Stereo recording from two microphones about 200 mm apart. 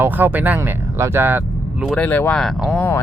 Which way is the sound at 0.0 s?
10° right (ahead or behind).